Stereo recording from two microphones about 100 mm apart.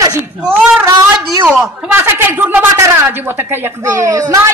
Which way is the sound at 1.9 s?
20° right (ahead or behind).